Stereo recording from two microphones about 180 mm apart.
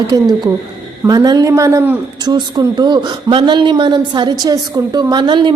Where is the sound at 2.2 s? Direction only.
25° right (ahead or behind).